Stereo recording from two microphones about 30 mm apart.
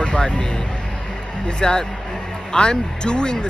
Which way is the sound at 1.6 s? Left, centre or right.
Left.